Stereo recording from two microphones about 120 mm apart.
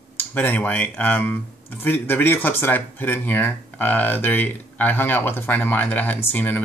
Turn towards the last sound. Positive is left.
turn(degrees=15)  # may be behind; listen again after turning